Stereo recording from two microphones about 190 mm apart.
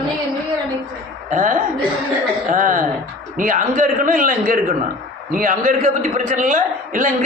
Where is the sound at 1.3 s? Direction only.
45° right (ahead or behind).